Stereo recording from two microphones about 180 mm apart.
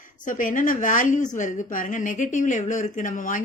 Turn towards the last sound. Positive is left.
turn(degrees=45)  # may be behind; listen again after turning